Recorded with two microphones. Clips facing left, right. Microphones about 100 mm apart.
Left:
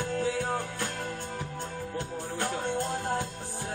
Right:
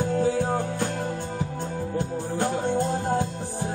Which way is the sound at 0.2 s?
35° right (ahead or behind).